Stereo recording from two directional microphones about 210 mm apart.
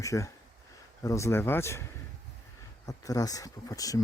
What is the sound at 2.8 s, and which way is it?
Speech, 15° left (ahead or behind).